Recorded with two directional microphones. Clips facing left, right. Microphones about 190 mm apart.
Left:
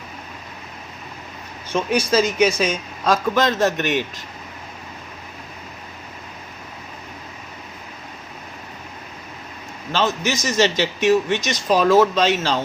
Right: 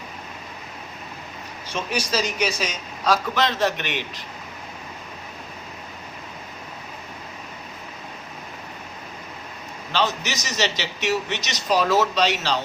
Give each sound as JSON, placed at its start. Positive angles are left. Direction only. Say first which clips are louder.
{"t": 1.7, "sound": "a man's voice", "louder": "left 7 dB", "side_deg": 55}
{"t": 9.9, "sound": "a man's voice", "louder": "left 4 dB", "side_deg": 50}